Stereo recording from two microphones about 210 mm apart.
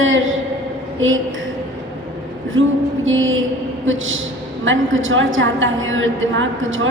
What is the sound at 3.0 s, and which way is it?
A woman's voice, 65° right (ahead or behind).